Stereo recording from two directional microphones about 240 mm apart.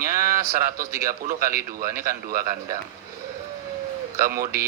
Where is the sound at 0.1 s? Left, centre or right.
Right.